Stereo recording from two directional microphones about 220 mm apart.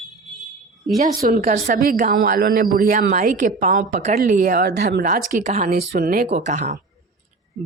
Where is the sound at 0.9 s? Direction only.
40° right (ahead or behind).